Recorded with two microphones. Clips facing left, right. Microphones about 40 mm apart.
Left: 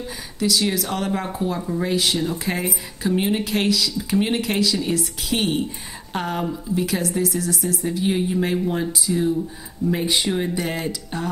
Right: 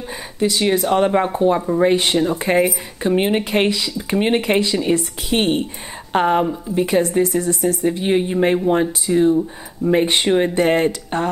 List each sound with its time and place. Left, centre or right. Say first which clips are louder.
0.4 s speech: right 4 dB; right